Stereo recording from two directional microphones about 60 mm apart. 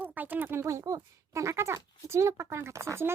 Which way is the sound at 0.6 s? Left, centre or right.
Right.